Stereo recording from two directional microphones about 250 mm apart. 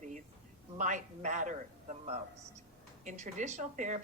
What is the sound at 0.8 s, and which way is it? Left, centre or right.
A woman's voice, right.